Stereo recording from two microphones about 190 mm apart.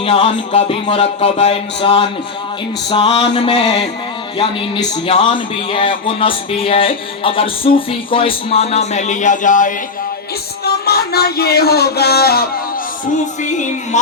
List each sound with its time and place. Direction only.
0.0 s speech: 30° left (ahead or behind)
10.8 s speech: 55° left (ahead or behind)
13.4 s music: 40° left (ahead or behind)